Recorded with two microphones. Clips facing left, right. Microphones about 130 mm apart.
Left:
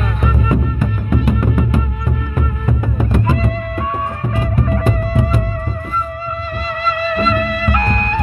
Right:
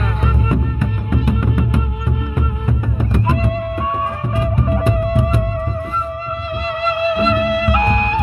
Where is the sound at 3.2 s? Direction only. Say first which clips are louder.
Even; 20° right (ahead or behind).